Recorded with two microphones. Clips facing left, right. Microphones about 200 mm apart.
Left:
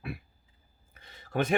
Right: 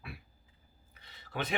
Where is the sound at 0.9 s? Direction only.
50° left (ahead or behind).